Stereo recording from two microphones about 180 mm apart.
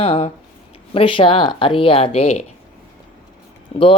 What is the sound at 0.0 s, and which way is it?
A woman's voice, 35° left (ahead or behind).